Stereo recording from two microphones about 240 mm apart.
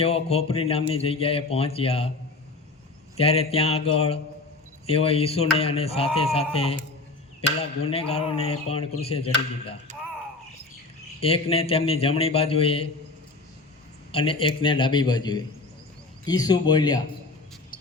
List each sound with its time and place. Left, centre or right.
0.0 s speech: left
3.2 s speech: left
7.9 s speech: left
11.2 s speech: left
14.1 s speech: left